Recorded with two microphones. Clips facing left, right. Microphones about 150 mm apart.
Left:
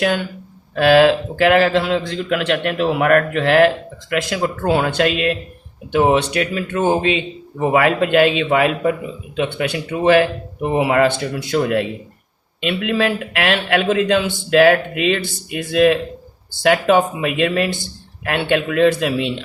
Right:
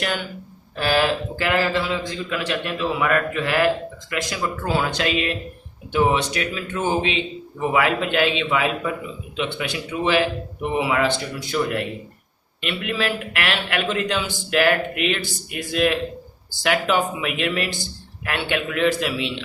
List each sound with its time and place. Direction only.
0.0 s speech: 65° left (ahead or behind)